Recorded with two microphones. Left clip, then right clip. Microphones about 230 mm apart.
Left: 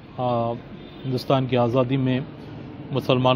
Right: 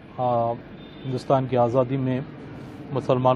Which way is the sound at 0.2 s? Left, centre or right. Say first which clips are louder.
Right 1 dB; left.